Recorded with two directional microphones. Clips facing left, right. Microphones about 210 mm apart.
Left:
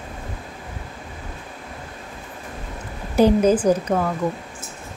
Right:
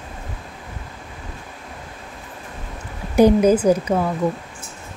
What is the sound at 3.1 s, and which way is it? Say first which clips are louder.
Speech: right 2 dB; 10° right (ahead or behind).